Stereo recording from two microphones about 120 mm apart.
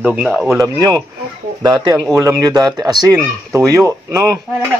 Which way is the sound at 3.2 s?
20° right (ahead or behind).